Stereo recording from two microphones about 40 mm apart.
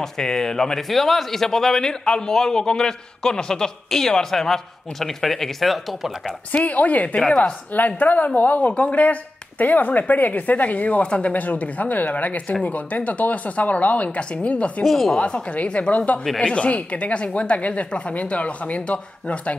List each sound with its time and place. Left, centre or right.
0.0 s a man's voice: centre
0.8 s a man's voice: centre
6.5 s speech: left
7.2 s a man's voice: centre
7.7 s a woman's voice: left
14.9 s a man's voice: centre
15.1 s a woman's voice: left